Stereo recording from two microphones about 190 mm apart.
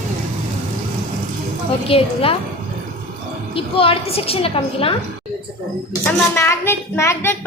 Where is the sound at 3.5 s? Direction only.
30° left (ahead or behind).